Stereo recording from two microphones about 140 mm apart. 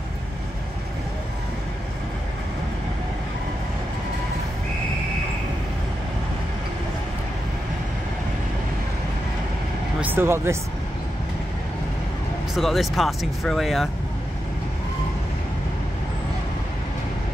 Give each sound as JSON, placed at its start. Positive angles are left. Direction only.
{"t": 9.9, "sound": "speech", "side_deg": -15}
{"t": 12.5, "sound": "speech", "side_deg": 0}